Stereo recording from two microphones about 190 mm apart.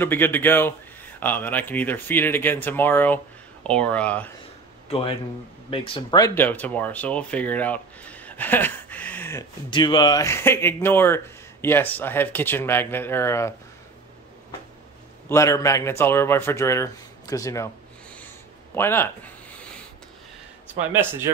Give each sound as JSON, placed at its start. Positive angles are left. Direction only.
{"t": 0.0, "sound": "speech", "side_deg": 10}
{"t": 4.8, "sound": "speech", "side_deg": 30}
{"t": 9.7, "sound": "speech", "side_deg": 25}
{"t": 15.2, "sound": "speech", "side_deg": 15}
{"t": 18.8, "sound": "speech", "side_deg": 10}
{"t": 20.9, "sound": "speech", "side_deg": -10}